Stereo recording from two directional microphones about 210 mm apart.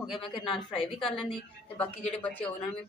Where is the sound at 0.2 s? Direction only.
25° left (ahead or behind).